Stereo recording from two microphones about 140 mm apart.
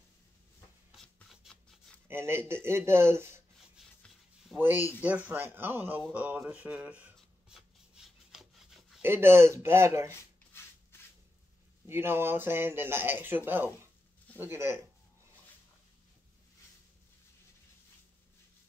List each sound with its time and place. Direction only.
0.9 s rub: centre (ahead or behind)
2.0 s speech: 15° right (ahead or behind)
3.8 s rub: 5° right (ahead or behind)
4.6 s speech: 15° right (ahead or behind)
6.1 s rub: 10° right (ahead or behind)
9.0 s speech: 15° right (ahead or behind)
10.1 s a sound: 15° left (ahead or behind)
11.9 s speech: 15° right (ahead or behind)